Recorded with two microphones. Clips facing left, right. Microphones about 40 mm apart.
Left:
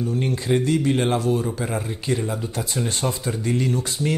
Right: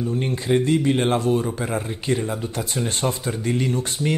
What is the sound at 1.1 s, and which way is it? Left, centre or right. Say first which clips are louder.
Speech: right 1 dB; right.